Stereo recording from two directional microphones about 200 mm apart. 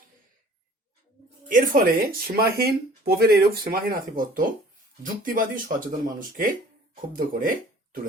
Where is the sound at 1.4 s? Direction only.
45° right (ahead or behind).